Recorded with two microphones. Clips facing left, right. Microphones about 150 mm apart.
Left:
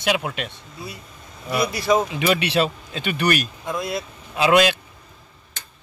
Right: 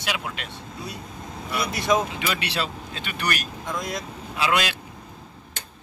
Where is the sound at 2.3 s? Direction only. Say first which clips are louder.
Left 8 dB; 20° left (ahead or behind).